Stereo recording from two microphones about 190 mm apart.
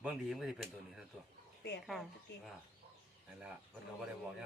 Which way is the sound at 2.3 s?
65° left (ahead or behind).